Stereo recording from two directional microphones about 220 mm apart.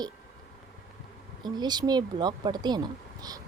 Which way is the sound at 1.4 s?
20° right (ahead or behind).